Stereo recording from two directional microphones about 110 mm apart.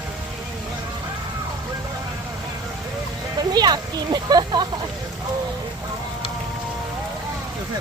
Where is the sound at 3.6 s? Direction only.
40° right (ahead or behind).